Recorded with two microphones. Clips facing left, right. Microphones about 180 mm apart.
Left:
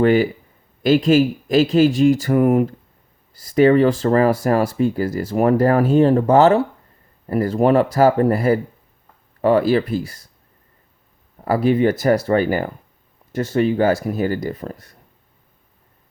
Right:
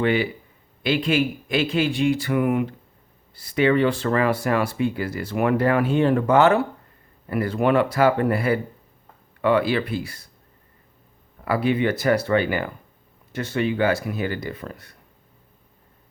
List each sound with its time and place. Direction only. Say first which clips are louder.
0.0 s speech: left 6 dB; 45° left (ahead or behind)
11.4 s speech: left 5 dB; 40° left (ahead or behind)